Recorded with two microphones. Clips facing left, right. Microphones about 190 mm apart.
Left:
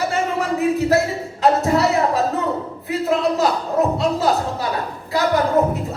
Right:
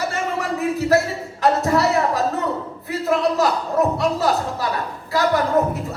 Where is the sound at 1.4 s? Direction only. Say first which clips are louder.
Left 1 dB; 20° left (ahead or behind).